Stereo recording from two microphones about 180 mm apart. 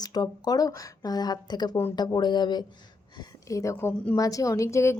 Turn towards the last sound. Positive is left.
turn(degrees=15)  # may be behind; listen again after turning